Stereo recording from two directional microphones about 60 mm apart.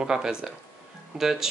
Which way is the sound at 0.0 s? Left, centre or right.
Centre.